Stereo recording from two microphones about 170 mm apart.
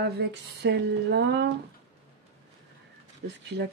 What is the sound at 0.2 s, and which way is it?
Speech, 90° right.